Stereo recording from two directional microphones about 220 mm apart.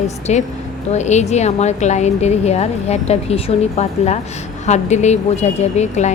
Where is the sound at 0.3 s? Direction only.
30° left (ahead or behind).